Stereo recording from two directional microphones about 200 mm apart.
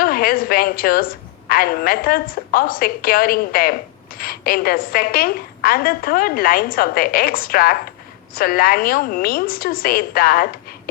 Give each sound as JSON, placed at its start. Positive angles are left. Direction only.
{"t": 0.0, "sound": "a woman's voice", "side_deg": 45}